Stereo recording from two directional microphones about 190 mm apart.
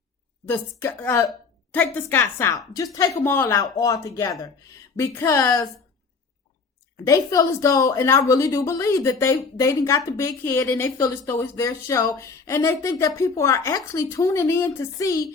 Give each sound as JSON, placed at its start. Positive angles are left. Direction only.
{"t": 0.4, "sound": "a woman's voice", "side_deg": 10}
{"t": 6.9, "sound": "a woman's voice", "side_deg": 15}